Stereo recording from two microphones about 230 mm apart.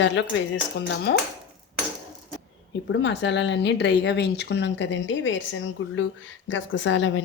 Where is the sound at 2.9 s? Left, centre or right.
Left.